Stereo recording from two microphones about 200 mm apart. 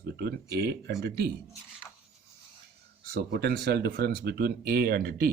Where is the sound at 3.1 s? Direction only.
50° right (ahead or behind).